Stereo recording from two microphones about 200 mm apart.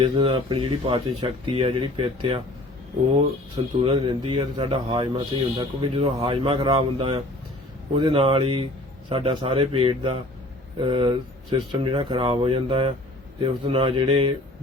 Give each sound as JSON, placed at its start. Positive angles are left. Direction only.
{"t": 0.0, "sound": "speech", "side_deg": -25}
{"t": 3.8, "sound": "speech", "side_deg": -30}